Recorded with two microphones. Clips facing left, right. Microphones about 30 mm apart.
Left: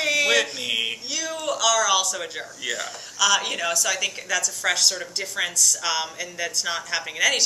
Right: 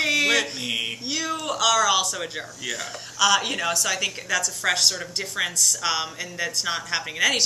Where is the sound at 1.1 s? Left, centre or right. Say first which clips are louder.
Even; centre.